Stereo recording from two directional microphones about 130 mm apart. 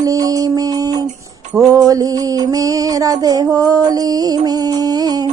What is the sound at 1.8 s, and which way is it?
Music, 30° right (ahead or behind).